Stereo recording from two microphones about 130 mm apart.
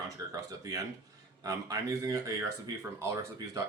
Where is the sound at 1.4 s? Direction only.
25° right (ahead or behind).